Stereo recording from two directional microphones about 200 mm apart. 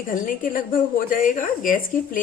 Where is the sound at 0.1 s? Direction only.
45° left (ahead or behind).